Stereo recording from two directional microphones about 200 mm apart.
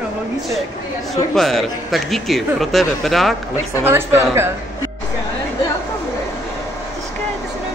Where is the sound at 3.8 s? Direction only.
10° right (ahead or behind).